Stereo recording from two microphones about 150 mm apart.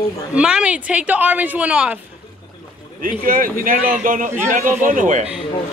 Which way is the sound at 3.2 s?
65° right (ahead or behind).